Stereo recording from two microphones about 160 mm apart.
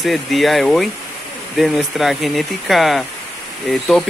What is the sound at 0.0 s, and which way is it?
Speech, centre (ahead or behind).